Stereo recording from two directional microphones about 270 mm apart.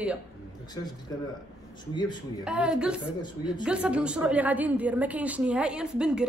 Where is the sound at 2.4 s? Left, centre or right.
Centre.